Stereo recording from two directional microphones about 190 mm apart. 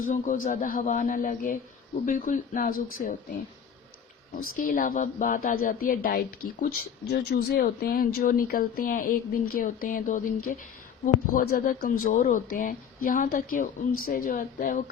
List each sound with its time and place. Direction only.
0.0 s a woman's voice: 45° left (ahead or behind)
4.5 s a woman's voice: 45° left (ahead or behind)